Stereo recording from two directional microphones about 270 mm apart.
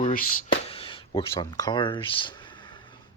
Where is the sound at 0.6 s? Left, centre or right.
Centre.